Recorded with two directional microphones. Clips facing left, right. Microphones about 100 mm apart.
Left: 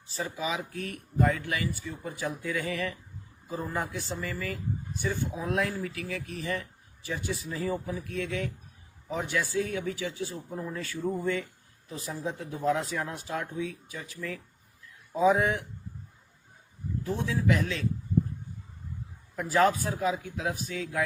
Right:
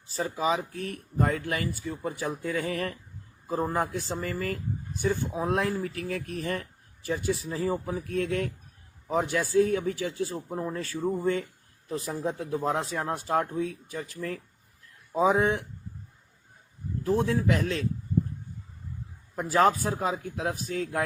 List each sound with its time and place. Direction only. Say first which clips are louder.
0.1 s speech: right 5 dB; 40° right (ahead or behind)
15.1 s speech: right 1 dB; 30° right (ahead or behind)
17.1 s speech: right 3 dB; 45° right (ahead or behind)
19.4 s speech: right 1 dB; 35° right (ahead or behind)